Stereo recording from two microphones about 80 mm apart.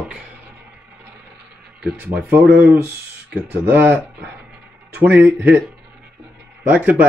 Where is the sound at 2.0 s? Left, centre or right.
Right.